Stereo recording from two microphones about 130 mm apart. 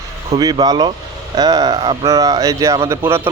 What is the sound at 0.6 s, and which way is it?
Speech, 30° right (ahead or behind).